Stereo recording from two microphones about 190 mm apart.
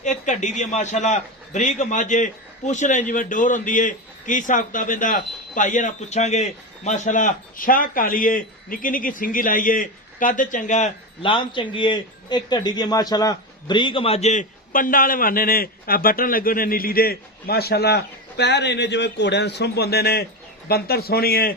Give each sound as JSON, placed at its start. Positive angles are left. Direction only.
{"t": 0.0, "sound": "a man's voice", "side_deg": 40}